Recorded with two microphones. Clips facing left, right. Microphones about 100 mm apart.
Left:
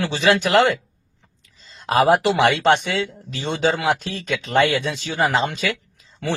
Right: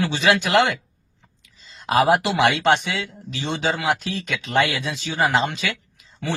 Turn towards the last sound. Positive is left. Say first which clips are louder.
# left 1 dB
turn(degrees=35)  # may be behind; listen again after turning